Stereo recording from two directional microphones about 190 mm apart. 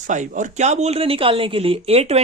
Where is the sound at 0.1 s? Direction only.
40° right (ahead or behind).